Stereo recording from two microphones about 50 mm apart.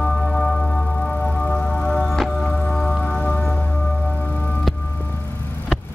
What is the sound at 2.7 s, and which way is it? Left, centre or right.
Music, centre.